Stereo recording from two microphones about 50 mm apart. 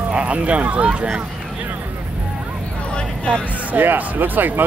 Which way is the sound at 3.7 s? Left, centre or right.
Right.